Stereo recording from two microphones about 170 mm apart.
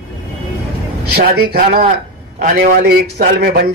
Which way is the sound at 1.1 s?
70° right (ahead or behind).